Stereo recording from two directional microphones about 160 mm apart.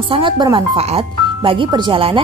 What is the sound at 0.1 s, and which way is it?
Speech, 30° right (ahead or behind).